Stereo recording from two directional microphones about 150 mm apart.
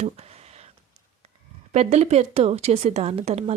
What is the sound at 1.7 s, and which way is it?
A woman's voice, 50° right (ahead or behind).